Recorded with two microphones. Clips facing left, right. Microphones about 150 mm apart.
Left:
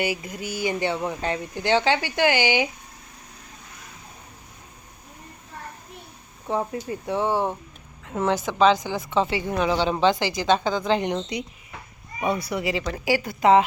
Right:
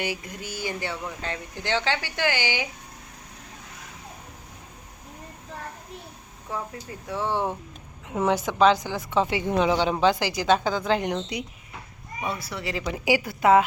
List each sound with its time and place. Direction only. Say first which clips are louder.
0.0 s speech: left 4 dB; 10° left (ahead or behind)
6.5 s speech: left 7 dB; 25° left (ahead or behind)
8.1 s speech: even; 10° right (ahead or behind)
8.8 s speech: left 2 dB; 10° left (ahead or behind)
9.0 s a woman's voice: even; 10° right (ahead or behind)
12.2 s speech: left 6 dB; 15° left (ahead or behind)
12.7 s speech: right 3 dB; 10° right (ahead or behind)
13.2 s a woman's voice: left 2 dB; centre (ahead or behind)